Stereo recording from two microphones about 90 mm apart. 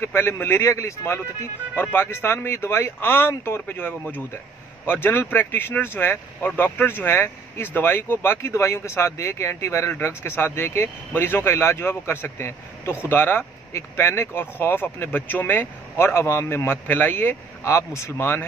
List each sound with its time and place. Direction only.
0.0 s speech: 25° left (ahead or behind)